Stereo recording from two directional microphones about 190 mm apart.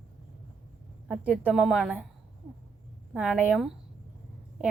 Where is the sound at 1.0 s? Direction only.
5° right (ahead or behind).